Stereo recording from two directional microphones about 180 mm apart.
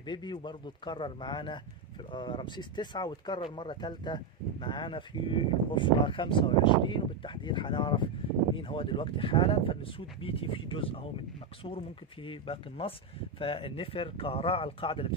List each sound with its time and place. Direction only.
0.0 s speech: 25° left (ahead or behind)